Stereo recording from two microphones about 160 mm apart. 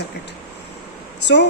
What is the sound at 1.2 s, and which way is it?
Speech, 90° left.